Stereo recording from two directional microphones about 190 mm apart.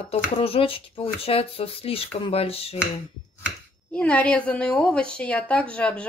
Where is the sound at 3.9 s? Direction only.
5° left (ahead or behind).